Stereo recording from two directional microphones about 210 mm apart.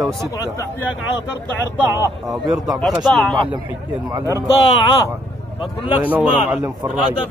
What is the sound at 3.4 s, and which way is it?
Speech, 10° right (ahead or behind).